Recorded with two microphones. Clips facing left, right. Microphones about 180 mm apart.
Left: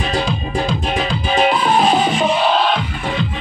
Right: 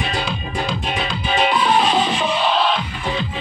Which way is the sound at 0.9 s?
45° left (ahead or behind).